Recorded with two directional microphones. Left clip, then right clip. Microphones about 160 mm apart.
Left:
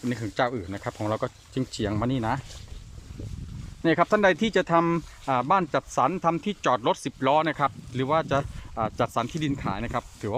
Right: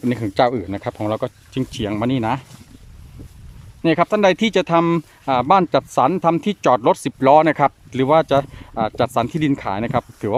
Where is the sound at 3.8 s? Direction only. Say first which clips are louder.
Right 5 dB; 15° right (ahead or behind).